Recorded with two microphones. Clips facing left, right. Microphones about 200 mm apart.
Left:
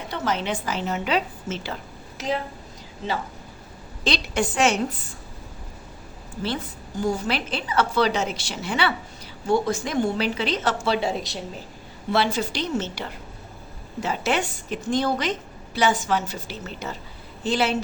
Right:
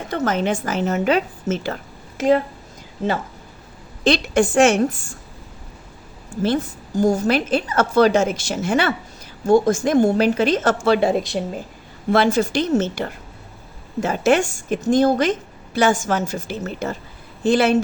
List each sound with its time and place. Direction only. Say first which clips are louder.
0.1 s a woman's voice: right 6 dB; 50° right (ahead or behind)
4.0 s a woman's voice: right 8 dB; 50° right (ahead or behind)
6.3 s a woman's voice: right 8 dB; 45° right (ahead or behind)